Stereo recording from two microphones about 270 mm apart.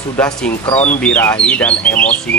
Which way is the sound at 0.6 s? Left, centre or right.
Left.